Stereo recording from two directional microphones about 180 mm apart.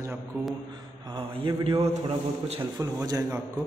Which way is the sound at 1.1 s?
30° right (ahead or behind).